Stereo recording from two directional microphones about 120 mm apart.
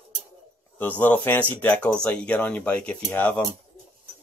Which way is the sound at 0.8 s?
15° left (ahead or behind).